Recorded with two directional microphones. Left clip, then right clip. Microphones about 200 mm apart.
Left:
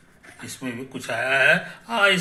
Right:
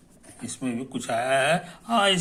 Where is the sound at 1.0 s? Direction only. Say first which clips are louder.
Left 3 dB; 25° right (ahead or behind).